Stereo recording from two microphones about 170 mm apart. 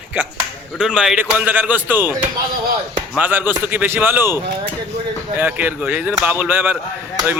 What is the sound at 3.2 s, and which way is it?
A man's voice, 10° right (ahead or behind).